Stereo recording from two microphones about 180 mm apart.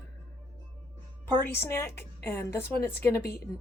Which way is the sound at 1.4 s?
15° left (ahead or behind).